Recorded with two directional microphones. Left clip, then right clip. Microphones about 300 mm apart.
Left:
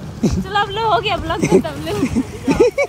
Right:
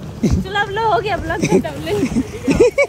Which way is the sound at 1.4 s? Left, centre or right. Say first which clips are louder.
Left 2 dB; centre.